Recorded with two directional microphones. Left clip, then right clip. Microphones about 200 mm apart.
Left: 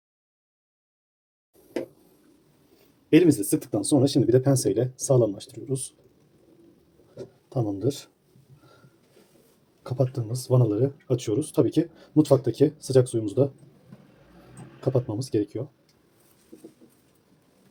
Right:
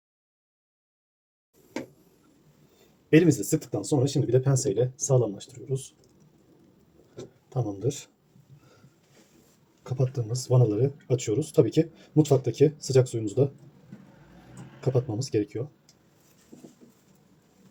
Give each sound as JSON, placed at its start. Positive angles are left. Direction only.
{"t": 3.1, "sound": "speech", "side_deg": 20}
{"t": 3.8, "sound": "speech", "side_deg": 40}
{"t": 7.5, "sound": "speech", "side_deg": 35}
{"t": 10.0, "sound": "speech", "side_deg": 25}
{"t": 14.8, "sound": "speech", "side_deg": 15}